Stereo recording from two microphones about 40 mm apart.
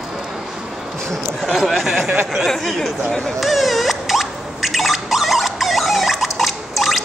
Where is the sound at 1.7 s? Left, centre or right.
Centre.